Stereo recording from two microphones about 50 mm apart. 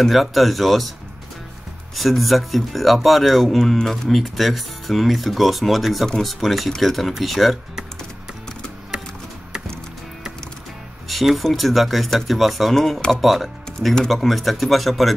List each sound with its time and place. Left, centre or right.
0.0 s speech: centre
2.0 s speech: centre
11.1 s speech: centre